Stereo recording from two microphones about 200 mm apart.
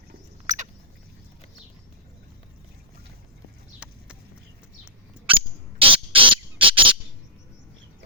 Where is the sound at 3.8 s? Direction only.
5° right (ahead or behind).